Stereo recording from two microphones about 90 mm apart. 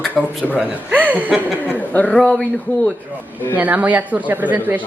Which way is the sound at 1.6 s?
15° left (ahead or behind).